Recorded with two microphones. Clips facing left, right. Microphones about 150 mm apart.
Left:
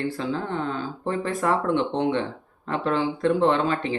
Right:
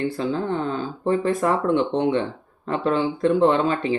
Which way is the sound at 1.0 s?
20° right (ahead or behind).